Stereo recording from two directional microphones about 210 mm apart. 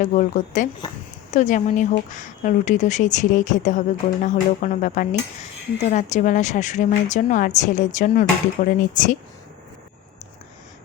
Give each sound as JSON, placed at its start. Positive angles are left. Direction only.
{"t": 0.0, "sound": "speech", "side_deg": 35}